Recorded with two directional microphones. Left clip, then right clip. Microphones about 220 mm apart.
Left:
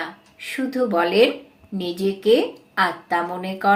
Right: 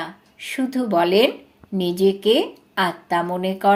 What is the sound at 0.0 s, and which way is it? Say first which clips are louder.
Speech: even; 40° right (ahead or behind).